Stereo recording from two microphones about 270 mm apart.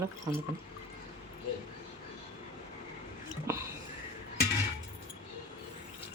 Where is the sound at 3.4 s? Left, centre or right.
Centre.